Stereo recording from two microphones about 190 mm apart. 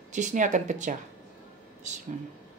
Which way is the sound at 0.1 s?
40° right (ahead or behind).